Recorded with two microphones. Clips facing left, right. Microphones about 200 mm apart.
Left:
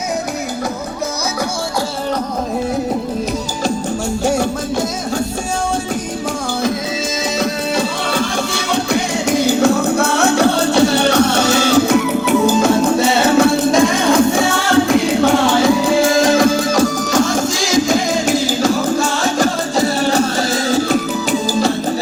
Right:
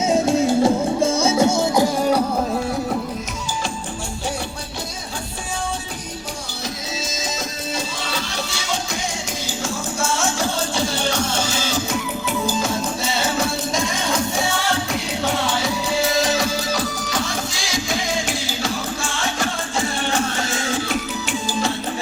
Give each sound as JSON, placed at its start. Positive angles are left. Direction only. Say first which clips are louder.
{"t": 7.3, "sound": "music", "louder": "left 10 dB", "side_deg": 65}
{"t": 15.9, "sound": "music", "louder": "left 8 dB", "side_deg": 50}